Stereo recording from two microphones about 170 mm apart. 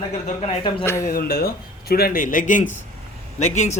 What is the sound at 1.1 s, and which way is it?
Speech, 60° left (ahead or behind).